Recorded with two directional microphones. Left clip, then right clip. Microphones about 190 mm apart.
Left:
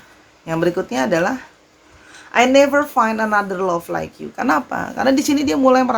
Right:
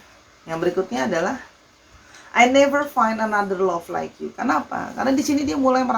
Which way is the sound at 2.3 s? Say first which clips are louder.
Left 3 dB; 55° left (ahead or behind).